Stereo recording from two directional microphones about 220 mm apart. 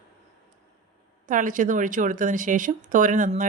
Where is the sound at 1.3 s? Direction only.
35° right (ahead or behind).